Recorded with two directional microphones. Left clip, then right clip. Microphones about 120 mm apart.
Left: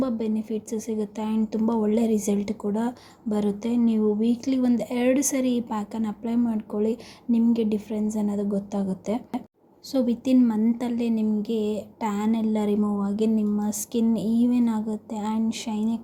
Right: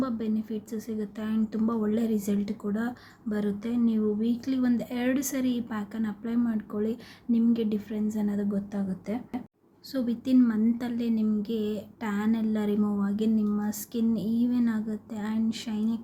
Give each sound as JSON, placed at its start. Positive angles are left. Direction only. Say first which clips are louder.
{"t": 0.0, "sound": "speech", "louder": "left 4 dB", "side_deg": 25}